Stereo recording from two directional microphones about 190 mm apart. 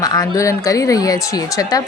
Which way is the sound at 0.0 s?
20° left (ahead or behind).